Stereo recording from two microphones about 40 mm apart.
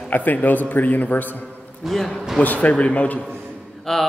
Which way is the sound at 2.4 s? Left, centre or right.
Left.